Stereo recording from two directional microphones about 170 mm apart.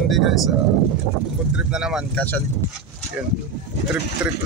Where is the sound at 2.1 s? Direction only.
10° left (ahead or behind).